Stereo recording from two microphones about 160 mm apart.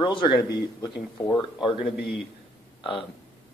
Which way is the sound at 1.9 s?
90° left.